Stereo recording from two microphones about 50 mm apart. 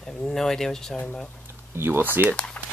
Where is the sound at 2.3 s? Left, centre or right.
Left.